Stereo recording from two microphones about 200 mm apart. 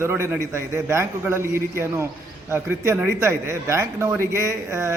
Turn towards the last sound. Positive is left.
turn(degrees=-15)  # may be behind; listen again after turning